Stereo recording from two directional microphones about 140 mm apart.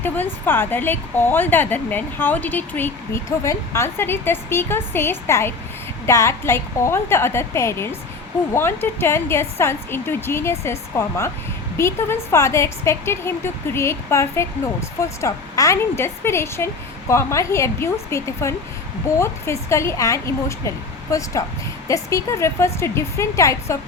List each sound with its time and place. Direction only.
0.0 s speech: 15° left (ahead or behind)